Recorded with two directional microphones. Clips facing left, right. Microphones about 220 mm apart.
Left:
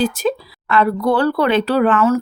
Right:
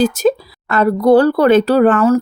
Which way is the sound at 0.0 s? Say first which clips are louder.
Right 5 dB; 45° right (ahead or behind).